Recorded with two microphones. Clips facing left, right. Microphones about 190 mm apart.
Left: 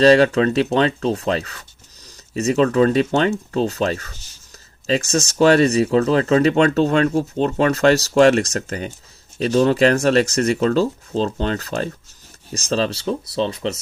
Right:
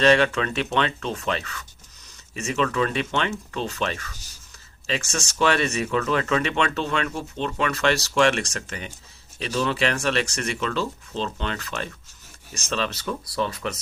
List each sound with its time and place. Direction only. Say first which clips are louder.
0.0 s speech: left 7 dB; 35° left (ahead or behind)